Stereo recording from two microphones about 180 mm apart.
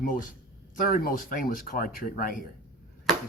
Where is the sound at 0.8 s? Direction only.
50° left (ahead or behind).